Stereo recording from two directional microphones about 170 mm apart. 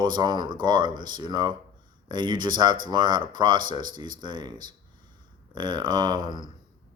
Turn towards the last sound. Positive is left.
turn(degrees=-25)  # may be behind; listen again after turning